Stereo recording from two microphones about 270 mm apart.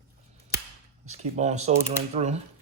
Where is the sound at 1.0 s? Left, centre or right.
Right.